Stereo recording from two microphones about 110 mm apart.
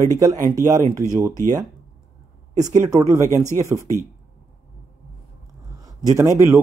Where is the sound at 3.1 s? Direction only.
30° right (ahead or behind).